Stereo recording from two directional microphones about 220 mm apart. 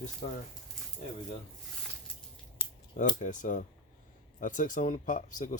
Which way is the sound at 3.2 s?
35° left (ahead or behind).